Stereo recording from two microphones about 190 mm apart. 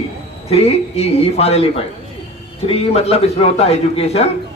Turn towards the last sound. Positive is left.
turn(degrees=35)  # may be behind; listen again after turning